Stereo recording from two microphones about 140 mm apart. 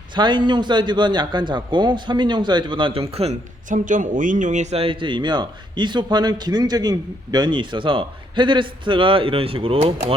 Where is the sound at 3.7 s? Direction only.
65° right (ahead or behind).